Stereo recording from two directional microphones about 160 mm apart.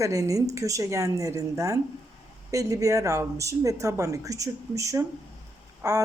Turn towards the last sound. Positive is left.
turn(degrees=-20)  # may be behind; listen again after turning